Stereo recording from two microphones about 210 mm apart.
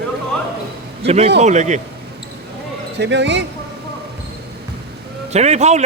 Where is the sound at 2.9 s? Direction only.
55° right (ahead or behind).